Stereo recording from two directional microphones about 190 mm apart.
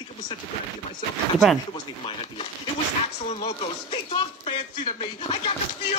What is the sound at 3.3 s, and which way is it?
Music, 35° left (ahead or behind).